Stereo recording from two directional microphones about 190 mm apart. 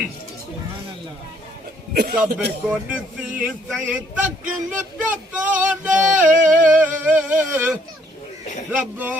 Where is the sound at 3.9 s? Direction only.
5° right (ahead or behind).